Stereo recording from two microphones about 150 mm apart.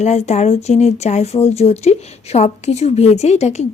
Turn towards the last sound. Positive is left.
turn(degrees=45)  # may be behind; listen again after turning